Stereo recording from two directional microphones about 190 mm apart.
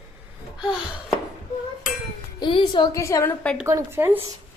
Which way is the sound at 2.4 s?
25° left (ahead or behind).